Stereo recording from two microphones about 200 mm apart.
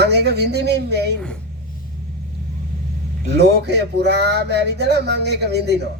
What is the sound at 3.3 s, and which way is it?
A man's voice, 55° right (ahead or behind).